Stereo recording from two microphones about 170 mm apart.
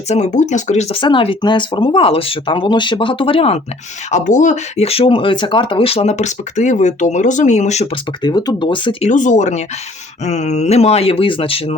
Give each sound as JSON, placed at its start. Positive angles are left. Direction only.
{"t": 0.1, "sound": "speech", "side_deg": 45}
{"t": 4.1, "sound": "speech", "side_deg": 45}
{"t": 8.2, "sound": "speech", "side_deg": 25}
{"t": 9.0, "sound": "speech", "side_deg": 45}